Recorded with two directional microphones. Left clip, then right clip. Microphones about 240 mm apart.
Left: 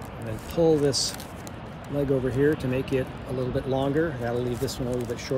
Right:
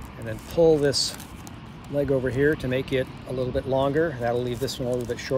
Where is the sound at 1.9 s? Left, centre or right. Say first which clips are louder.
Right 2 dB; centre.